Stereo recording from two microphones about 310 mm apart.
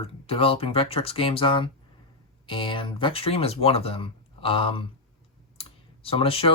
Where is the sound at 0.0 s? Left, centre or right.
Centre.